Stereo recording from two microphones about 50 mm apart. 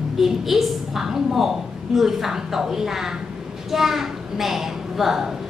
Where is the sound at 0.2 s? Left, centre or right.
Centre.